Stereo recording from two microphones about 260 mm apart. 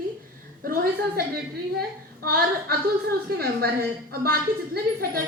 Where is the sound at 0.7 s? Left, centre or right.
Right.